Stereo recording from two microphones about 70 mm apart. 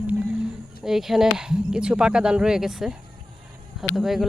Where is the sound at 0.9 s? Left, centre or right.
Centre.